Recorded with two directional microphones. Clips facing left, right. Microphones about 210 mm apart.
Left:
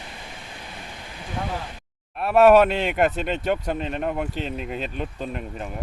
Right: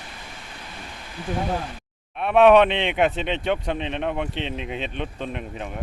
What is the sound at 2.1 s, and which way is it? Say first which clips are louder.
Speech: even; centre (ahead or behind).